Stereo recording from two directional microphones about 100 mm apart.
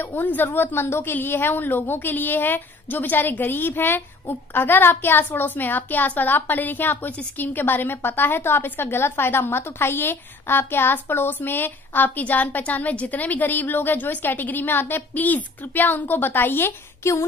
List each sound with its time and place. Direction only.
0.0 s a woman's voice: 15° left (ahead or behind)